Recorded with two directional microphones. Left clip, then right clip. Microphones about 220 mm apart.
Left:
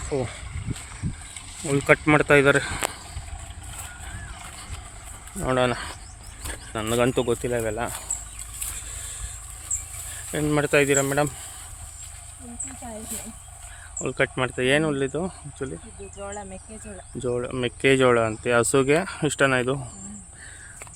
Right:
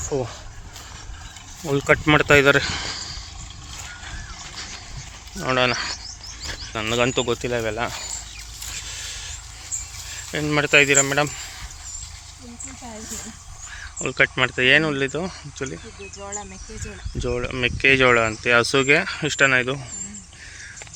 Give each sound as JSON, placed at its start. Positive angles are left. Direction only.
{"t": 0.0, "sound": "speech", "side_deg": -20}
{"t": 1.6, "sound": "speech", "side_deg": -10}
{"t": 5.4, "sound": "speech", "side_deg": 10}
{"t": 8.9, "sound": "vehicle", "side_deg": 0}
{"t": 10.3, "sound": "speech", "side_deg": 5}
{"t": 14.0, "sound": "speech", "side_deg": 5}
{"t": 16.1, "sound": "speech", "side_deg": 50}
{"t": 17.2, "sound": "speech", "side_deg": 0}